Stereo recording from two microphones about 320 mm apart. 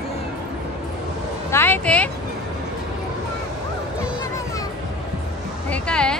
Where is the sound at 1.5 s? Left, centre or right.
Centre.